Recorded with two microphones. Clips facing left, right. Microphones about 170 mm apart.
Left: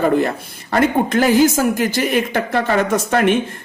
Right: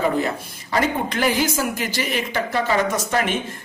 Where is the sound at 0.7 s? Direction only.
50° left (ahead or behind).